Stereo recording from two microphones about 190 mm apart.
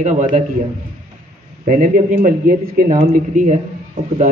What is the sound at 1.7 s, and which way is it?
A man's voice, 45° right (ahead or behind).